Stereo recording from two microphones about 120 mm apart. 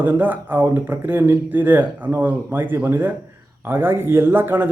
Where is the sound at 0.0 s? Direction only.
15° right (ahead or behind).